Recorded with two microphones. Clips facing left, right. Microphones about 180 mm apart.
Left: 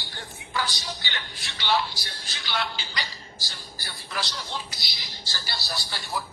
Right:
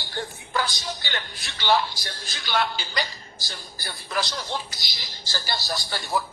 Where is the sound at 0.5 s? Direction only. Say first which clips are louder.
Right 3 dB; 50° right (ahead or behind).